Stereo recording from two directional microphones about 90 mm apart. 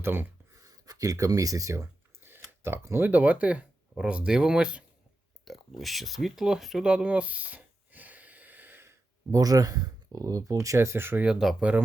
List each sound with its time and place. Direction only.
0.0 s speech: 25° right (ahead or behind)
0.6 s speech: 40° right (ahead or behind); by 4.8 s 10° right (ahead or behind)
5.5 s a sound: centre (ahead or behind); by 9.0 s 25° right (ahead or behind)
9.3 s speech: 40° right (ahead or behind); by 11.3 s 25° right (ahead or behind)
11.3 s speech: 5° right (ahead or behind)